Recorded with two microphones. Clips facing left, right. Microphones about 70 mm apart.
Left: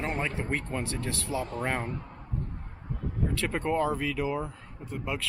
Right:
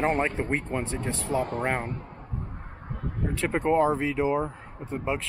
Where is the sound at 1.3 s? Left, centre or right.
Right.